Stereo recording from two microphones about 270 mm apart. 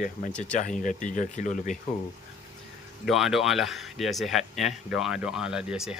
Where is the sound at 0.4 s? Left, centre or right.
Left.